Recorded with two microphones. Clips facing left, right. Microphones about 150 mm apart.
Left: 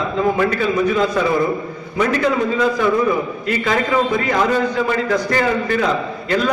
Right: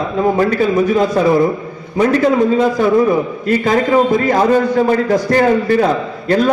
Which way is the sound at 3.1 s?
40° right (ahead or behind).